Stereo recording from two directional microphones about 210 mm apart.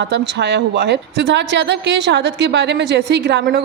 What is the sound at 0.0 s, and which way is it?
A woman's voice, 55° right (ahead or behind).